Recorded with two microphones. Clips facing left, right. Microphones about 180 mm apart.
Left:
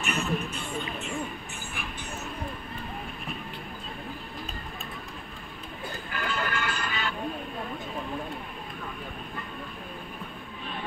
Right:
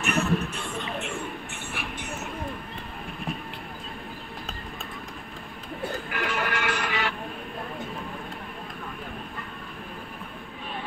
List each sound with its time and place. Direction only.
0.0 s speech: 70° right (ahead or behind)
0.7 s a sound: 80° right
1.7 s vehicle: 80° right
6.1 s music: 90° right